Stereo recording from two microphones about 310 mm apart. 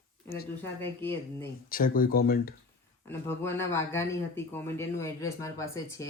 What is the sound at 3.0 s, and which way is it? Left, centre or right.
Speech, centre.